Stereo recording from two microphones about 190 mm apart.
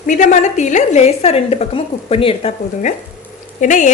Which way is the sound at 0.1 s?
40° left (ahead or behind).